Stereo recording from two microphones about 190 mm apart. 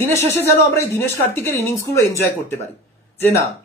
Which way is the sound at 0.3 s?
10° left (ahead or behind).